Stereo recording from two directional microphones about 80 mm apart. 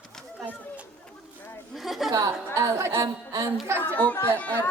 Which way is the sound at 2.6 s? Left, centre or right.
Right.